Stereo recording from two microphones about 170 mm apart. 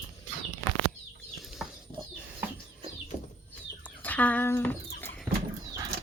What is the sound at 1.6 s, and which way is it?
Bird, 5° right (ahead or behind).